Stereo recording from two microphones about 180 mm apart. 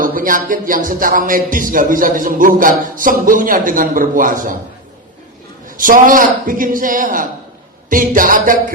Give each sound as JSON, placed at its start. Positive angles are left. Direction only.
{"t": 0.0, "sound": "speech", "side_deg": -50}
{"t": 5.6, "sound": "speech", "side_deg": -50}